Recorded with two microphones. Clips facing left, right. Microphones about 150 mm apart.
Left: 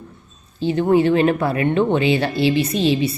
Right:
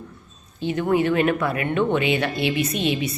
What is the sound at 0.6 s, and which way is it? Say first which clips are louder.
Speech: left 5 dB; 30° left (ahead or behind).